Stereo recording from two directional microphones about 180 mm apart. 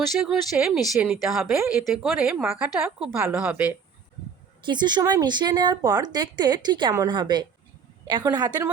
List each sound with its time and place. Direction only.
0.0 s speech: centre (ahead or behind)
4.6 s speech: 25° right (ahead or behind)